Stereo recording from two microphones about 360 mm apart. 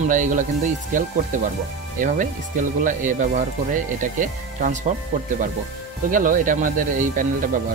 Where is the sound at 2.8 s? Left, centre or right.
Right.